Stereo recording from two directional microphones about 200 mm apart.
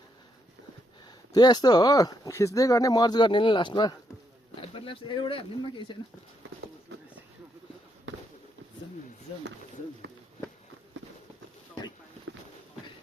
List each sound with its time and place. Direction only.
1.3 s speech: 20° left (ahead or behind)